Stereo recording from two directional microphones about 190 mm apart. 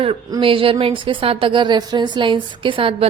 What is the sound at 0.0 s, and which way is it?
A woman's voice, 25° right (ahead or behind).